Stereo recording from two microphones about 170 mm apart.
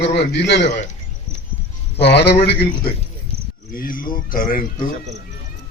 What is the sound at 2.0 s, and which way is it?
Speech, 80° left.